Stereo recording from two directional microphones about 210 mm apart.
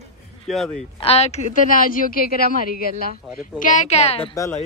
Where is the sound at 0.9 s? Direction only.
30° left (ahead or behind).